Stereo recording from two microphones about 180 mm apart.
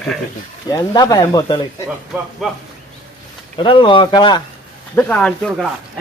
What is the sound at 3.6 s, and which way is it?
Speech, 30° left (ahead or behind).